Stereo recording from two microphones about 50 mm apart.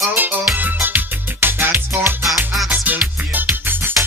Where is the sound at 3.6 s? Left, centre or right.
Right.